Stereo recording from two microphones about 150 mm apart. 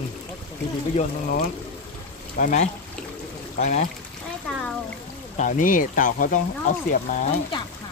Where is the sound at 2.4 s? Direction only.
60° left (ahead or behind).